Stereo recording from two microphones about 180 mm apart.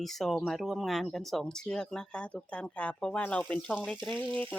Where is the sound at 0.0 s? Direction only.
Centre (ahead or behind).